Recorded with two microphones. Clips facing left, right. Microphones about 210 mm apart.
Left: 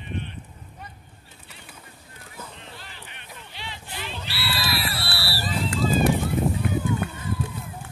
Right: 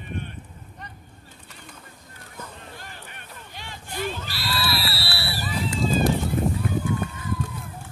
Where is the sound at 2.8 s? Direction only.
45° right (ahead or behind).